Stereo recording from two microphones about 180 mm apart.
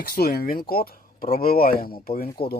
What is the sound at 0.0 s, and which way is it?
Speech, 60° left (ahead or behind).